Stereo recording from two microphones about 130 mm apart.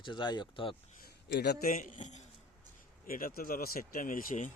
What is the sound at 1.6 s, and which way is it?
Speech, 85° left.